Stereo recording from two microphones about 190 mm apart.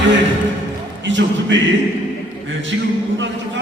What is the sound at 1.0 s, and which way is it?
Speech, 75° right (ahead or behind).